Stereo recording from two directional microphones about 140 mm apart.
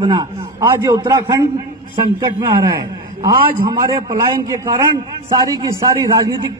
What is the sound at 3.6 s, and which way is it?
A man's voice, 35° right (ahead or behind).